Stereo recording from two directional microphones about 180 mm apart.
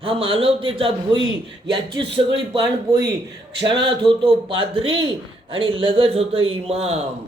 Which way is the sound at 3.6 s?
25° right (ahead or behind).